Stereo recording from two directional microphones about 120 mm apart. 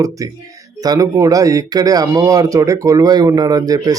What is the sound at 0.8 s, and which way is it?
A man's voice, 30° right (ahead or behind).